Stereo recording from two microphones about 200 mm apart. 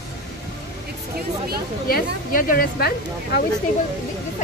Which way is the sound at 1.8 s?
45° left (ahead or behind).